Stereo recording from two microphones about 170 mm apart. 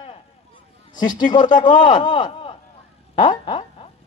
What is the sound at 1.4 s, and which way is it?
Speech, 50° left (ahead or behind).